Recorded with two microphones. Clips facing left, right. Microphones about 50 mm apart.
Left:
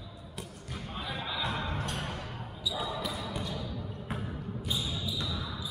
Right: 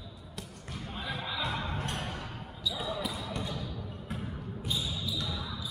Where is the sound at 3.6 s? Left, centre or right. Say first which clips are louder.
Left 1 dB; left.